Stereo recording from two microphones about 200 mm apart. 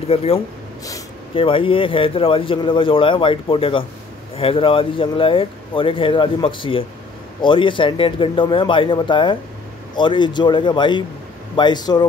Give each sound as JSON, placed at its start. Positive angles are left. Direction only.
{"t": 0.1, "sound": "speech", "side_deg": 30}